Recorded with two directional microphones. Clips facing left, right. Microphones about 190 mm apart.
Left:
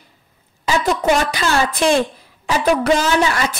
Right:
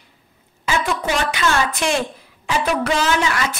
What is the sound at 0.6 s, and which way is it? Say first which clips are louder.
Speech: left 5 dB; 40° left (ahead or behind).